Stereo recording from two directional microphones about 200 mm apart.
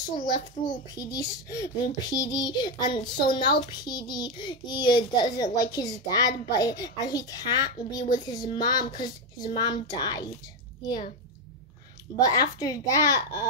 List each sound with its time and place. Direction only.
0.9 s a child's voice: 20° left (ahead or behind)
12.3 s a child's voice: 20° left (ahead or behind)